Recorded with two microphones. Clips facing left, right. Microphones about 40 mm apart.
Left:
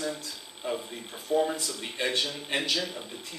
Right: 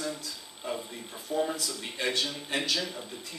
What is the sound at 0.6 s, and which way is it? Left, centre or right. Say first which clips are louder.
Speech: left 3 dB; left.